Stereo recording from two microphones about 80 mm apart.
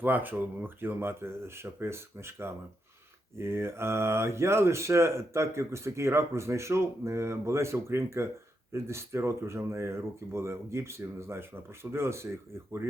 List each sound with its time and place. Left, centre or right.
0.0 s speech: right